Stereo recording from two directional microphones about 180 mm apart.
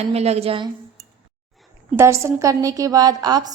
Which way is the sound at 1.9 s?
15° right (ahead or behind).